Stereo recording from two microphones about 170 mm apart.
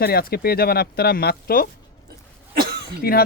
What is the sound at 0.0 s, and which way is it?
A man's voice, 65° left (ahead or behind).